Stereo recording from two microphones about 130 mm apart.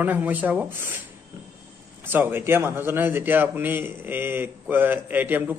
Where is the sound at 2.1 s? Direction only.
15° right (ahead or behind).